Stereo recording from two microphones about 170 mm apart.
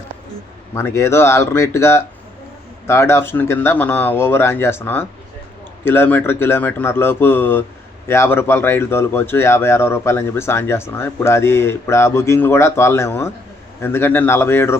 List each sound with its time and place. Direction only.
0.7 s speech: 15° left (ahead or behind)